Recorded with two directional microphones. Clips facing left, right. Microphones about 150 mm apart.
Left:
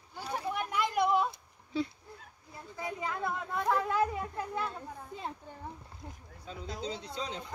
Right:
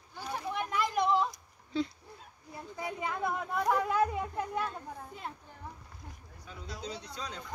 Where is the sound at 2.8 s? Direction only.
15° right (ahead or behind).